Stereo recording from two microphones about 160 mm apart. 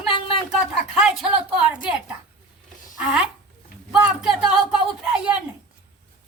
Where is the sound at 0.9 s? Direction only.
5° right (ahead or behind).